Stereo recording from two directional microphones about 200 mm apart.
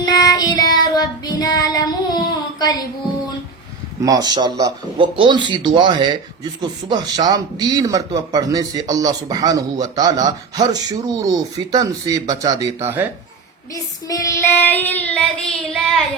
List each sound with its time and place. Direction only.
0.0 s child singing: 20° left (ahead or behind)
4.0 s speech: 20° right (ahead or behind)
13.7 s child singing: 15° left (ahead or behind)